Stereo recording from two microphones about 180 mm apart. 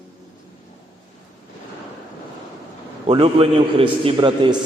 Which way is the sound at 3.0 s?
35° right (ahead or behind).